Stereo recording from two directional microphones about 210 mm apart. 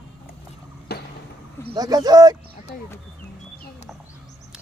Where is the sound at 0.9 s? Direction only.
50° left (ahead or behind).